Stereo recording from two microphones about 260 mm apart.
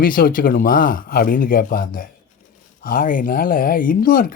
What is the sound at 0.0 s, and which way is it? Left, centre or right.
Speech, left.